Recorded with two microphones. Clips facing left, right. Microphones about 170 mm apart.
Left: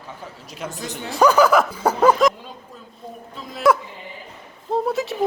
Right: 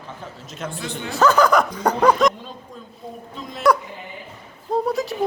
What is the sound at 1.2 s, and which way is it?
Speech, 10° left (ahead or behind).